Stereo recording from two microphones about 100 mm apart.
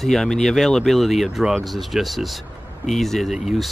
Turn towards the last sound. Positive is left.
turn(degrees=0)  # may be behind; listen again after turning